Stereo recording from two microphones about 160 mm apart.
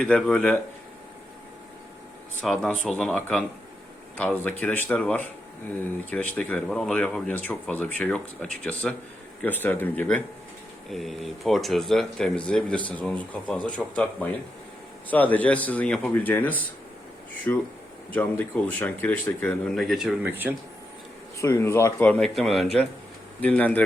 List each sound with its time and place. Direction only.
0.0 s speech: 5° left (ahead or behind)
2.4 s speech: 5° left (ahead or behind)
10.9 s speech: centre (ahead or behind)
21.3 s speech: 15° left (ahead or behind)